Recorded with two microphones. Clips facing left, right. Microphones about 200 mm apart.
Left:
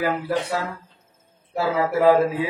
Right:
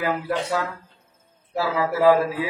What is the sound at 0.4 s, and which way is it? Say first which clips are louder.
Mantra: right 1 dB; 25° left (ahead or behind).